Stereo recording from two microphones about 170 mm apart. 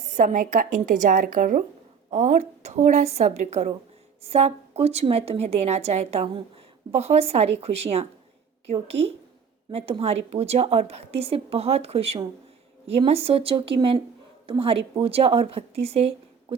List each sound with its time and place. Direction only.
0.1 s speech: 45° right (ahead or behind)
2.0 s a woman's voice: 40° right (ahead or behind)